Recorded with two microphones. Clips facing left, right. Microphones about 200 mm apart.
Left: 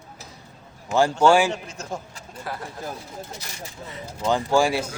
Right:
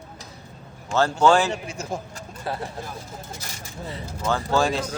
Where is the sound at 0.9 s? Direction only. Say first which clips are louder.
Left 1 dB; 10° left (ahead or behind).